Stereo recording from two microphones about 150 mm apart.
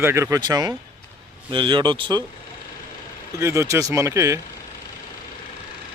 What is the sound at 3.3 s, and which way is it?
Speech, 20° right (ahead or behind).